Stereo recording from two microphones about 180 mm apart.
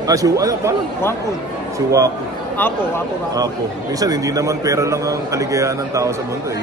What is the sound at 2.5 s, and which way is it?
Speech, 10° left (ahead or behind).